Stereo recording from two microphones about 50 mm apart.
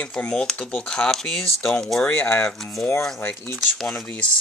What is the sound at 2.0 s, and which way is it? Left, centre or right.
Speech, left.